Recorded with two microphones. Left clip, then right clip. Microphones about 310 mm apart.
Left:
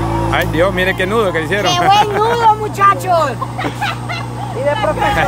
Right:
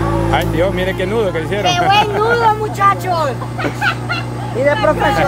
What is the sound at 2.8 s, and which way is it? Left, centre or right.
Speech, centre.